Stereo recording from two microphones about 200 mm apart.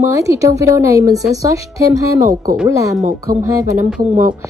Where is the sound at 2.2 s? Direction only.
35° right (ahead or behind).